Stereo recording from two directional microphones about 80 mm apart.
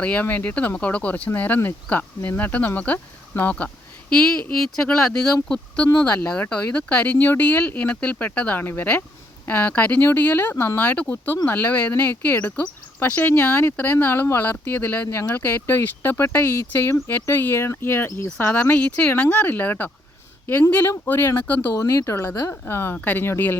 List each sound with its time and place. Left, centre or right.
0.0 s speech: centre
4.7 s speech: centre
21.8 s speech: left